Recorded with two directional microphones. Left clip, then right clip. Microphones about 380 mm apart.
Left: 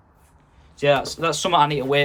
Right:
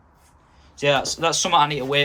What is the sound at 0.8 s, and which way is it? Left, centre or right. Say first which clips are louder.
Speech: left 1 dB; centre.